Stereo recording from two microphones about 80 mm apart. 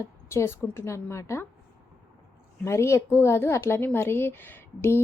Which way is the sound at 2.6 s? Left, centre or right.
Left.